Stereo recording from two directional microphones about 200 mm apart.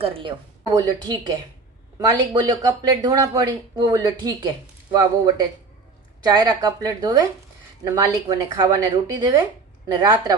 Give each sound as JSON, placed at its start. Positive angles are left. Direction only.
{"t": 0.0, "sound": "a woman's voice", "side_deg": -25}
{"t": 6.2, "sound": "a woman's voice", "side_deg": -20}